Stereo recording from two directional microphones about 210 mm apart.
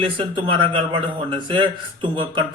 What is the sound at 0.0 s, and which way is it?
A man's voice, 25° right (ahead or behind).